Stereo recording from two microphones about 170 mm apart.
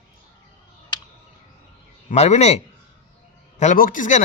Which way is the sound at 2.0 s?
40° left (ahead or behind).